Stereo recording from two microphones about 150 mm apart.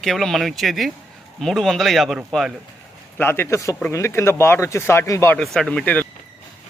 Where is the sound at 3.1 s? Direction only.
15° left (ahead or behind).